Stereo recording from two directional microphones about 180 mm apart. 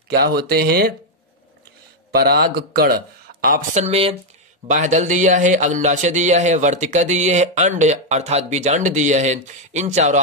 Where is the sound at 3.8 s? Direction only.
35° right (ahead or behind).